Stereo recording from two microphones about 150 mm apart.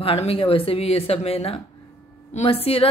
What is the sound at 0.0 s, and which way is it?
A woman's voice, 40° left (ahead or behind).